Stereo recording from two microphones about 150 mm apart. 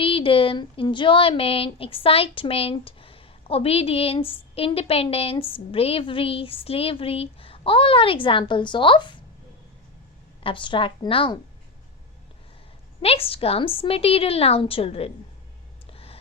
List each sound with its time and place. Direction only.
0.0 s speech: 35° left (ahead or behind)
10.4 s speech: 35° left (ahead or behind)
13.0 s speech: 40° left (ahead or behind)
15.9 s a sound: 40° left (ahead or behind)